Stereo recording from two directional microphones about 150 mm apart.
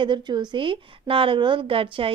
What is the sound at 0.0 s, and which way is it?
A woman's voice, 30° right (ahead or behind).